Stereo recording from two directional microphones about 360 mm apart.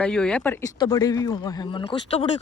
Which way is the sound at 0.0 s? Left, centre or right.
Centre.